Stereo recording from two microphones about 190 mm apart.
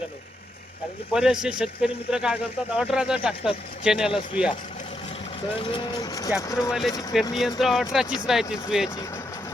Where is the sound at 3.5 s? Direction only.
50° left (ahead or behind).